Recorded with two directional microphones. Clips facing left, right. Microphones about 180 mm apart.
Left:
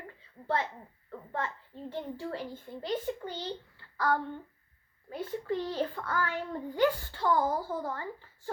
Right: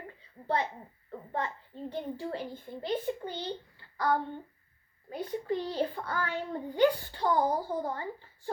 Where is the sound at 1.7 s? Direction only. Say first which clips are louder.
Right 2 dB; 15° right (ahead or behind).